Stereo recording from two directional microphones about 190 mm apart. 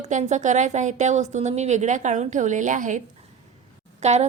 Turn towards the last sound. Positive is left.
turn(degrees=-35)  # may be behind; listen again after turning